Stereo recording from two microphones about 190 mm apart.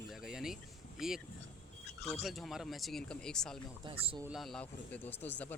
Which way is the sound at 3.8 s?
25° right (ahead or behind).